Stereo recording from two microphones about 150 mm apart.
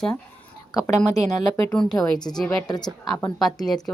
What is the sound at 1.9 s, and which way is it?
A woman's voice, 25° left (ahead or behind).